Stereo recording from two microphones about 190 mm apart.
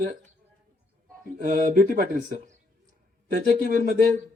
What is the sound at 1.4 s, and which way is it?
Speech, 45° right (ahead or behind).